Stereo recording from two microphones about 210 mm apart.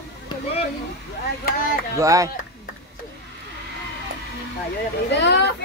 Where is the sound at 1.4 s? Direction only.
45° left (ahead or behind).